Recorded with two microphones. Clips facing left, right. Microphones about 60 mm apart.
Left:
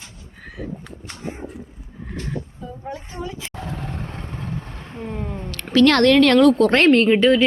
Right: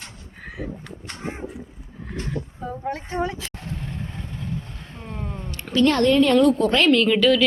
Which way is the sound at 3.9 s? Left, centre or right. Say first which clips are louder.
Left 2 dB; left.